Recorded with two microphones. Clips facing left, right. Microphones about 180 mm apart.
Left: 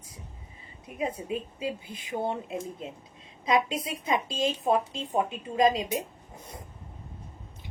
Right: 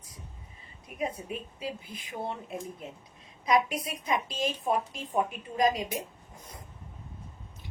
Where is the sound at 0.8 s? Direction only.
25° left (ahead or behind).